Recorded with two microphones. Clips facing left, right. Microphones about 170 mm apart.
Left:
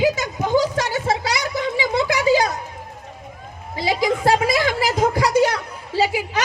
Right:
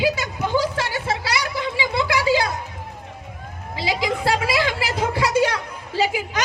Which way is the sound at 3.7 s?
45° left (ahead or behind).